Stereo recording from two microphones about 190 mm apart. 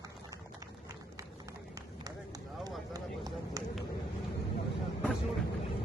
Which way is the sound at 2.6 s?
20° right (ahead or behind).